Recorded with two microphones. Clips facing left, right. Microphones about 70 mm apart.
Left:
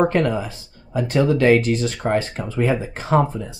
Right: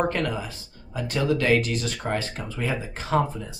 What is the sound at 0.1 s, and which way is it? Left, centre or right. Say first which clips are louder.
Speech: left 7 dB; left.